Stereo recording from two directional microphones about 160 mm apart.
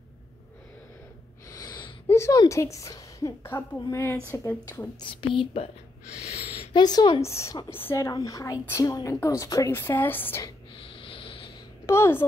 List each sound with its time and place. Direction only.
1.5 s a sound: 25° left (ahead or behind)
2.0 s speech: 15° left (ahead or behind)
5.0 s speech: 30° left (ahead or behind)
6.7 s speech: 25° left (ahead or behind)
11.0 s vehicle: 35° left (ahead or behind)
11.8 s a woman's voice: 15° left (ahead or behind)